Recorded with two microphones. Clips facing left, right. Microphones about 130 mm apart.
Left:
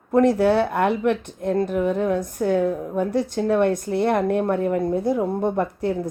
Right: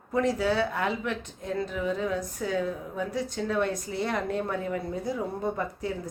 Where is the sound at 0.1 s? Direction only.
60° left (ahead or behind).